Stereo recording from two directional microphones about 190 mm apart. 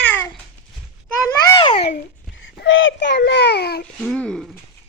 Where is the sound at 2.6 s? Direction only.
90° left; by 3.8 s 60° left (ahead or behind).